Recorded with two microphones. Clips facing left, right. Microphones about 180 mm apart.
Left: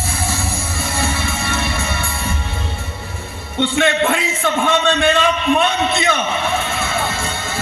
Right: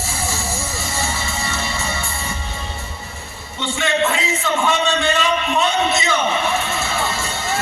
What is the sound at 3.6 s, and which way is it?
A man's voice, 60° left (ahead or behind).